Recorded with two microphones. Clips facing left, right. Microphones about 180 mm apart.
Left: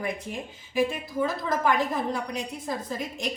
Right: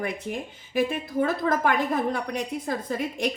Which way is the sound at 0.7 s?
55° right (ahead or behind).